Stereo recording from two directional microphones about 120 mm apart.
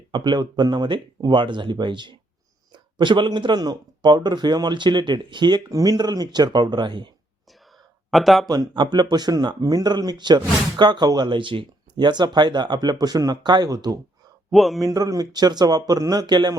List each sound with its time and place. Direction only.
0.1 s a man's voice: 40° right (ahead or behind)
8.1 s speech: centre (ahead or behind)
8.4 s a man's voice: 35° right (ahead or behind)
14.5 s speech: centre (ahead or behind)
14.8 s a man's voice: 30° right (ahead or behind)